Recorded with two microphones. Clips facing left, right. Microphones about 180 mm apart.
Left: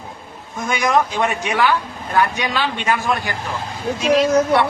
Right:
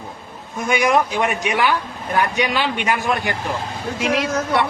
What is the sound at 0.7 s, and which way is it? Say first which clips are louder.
Speech: right 1 dB; 10° right (ahead or behind).